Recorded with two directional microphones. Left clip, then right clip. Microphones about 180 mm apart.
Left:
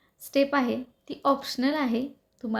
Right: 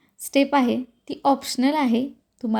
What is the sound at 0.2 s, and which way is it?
A woman's voice, 30° right (ahead or behind).